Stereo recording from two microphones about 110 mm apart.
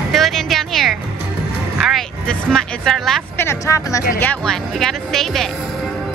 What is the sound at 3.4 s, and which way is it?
Speech, 25° left (ahead or behind).